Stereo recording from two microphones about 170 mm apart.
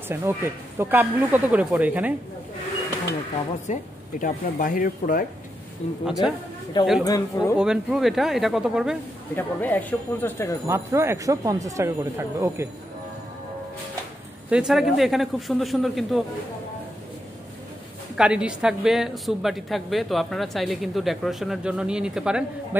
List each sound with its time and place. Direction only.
0.1 s speech: 15° right (ahead or behind)
3.7 s speech: 45° left (ahead or behind)
5.8 s speech: 40° left (ahead or behind)
7.1 s speech: 20° left (ahead or behind)
7.5 s a woman's voice: 5° right (ahead or behind)
9.3 s speech: 10° left (ahead or behind)
10.7 s speech: 15° right (ahead or behind)
14.5 s a woman's voice: 5° right (ahead or behind)
18.1 s a woman's voice: 5° right (ahead or behind)